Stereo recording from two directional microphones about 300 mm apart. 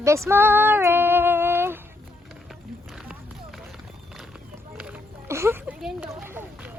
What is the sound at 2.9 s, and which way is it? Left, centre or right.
Run, centre.